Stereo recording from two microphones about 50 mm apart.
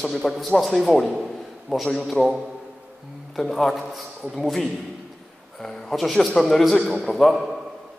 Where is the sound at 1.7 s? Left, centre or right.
Centre.